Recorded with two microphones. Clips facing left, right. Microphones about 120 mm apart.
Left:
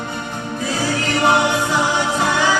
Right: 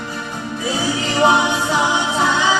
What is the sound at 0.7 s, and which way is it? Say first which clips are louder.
Music: even; 20° right (ahead or behind).